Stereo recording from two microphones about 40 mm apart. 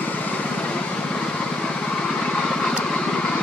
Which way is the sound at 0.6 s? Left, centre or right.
Left.